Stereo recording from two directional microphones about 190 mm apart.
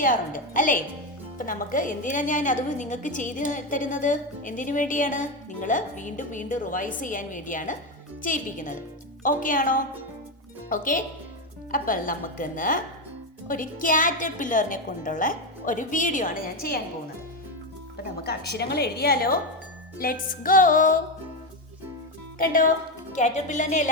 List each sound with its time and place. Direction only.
0.0 s a woman's voice: 45° left (ahead or behind)
17.9 s a woman's voice: 55° left (ahead or behind)
22.4 s a woman's voice: 45° left (ahead or behind)